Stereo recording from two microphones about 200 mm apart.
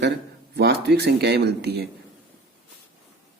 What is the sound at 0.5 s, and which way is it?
Speech, 55° right (ahead or behind).